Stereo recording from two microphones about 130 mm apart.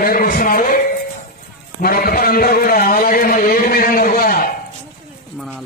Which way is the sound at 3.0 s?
90° left.